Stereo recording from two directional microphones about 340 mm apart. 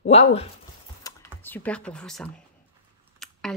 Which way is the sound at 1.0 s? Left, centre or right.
Centre.